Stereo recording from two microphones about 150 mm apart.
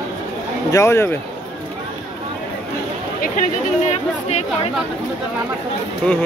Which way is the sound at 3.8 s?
50° left (ahead or behind).